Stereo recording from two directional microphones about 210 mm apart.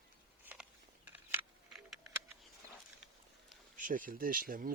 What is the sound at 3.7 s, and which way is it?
Speech, 40° right (ahead or behind).